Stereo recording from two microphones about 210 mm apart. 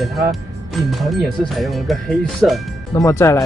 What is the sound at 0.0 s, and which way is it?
Speech, centre (ahead or behind).